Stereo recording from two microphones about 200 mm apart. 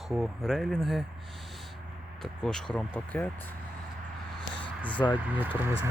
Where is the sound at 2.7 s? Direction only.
10° left (ahead or behind).